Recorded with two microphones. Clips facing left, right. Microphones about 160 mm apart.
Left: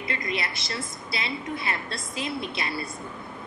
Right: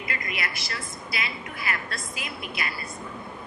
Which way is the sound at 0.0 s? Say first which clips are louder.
Left 3 dB; 25° left (ahead or behind).